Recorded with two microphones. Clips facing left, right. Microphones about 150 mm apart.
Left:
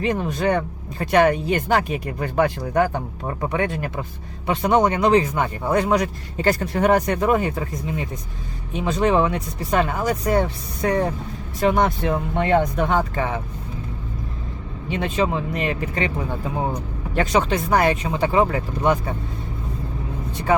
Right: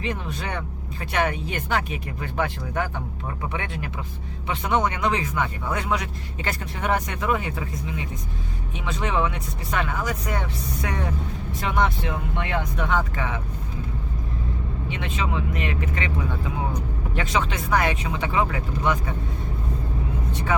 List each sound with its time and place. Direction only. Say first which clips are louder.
0.0 s speech: left 9 dB; 40° left (ahead or behind)
8.8 s speech: left 7 dB; 40° left (ahead or behind)
13.0 s speech: left 5 dB; 35° left (ahead or behind)
14.8 s speech: left 8 dB; 35° left (ahead or behind)
17.2 s speech: left 7 dB; 40° left (ahead or behind)